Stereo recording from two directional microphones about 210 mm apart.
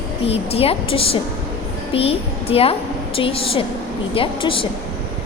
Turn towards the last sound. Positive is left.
turn(degrees=25)  # may be behind; listen again after turning